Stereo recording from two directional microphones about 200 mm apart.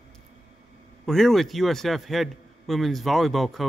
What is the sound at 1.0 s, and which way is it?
A man's voice, centre (ahead or behind).